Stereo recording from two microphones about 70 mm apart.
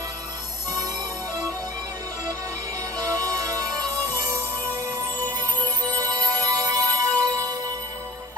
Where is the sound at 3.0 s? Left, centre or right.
Right.